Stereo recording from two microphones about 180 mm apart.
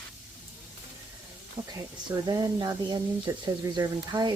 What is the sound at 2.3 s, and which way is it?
Speech, 20° right (ahead or behind).